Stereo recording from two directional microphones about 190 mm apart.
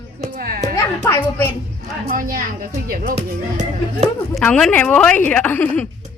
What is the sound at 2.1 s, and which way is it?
Speech, 45° right (ahead or behind).